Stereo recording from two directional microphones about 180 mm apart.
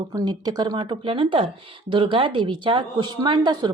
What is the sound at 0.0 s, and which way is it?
Speech, 20° right (ahead or behind).